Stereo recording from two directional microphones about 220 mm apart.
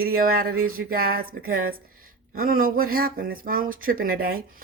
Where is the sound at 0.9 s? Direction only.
40° right (ahead or behind).